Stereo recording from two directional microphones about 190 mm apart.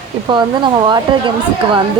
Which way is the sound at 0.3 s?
25° right (ahead or behind).